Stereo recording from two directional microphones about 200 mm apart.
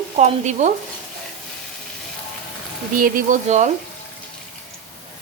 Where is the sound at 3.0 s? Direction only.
40° right (ahead or behind).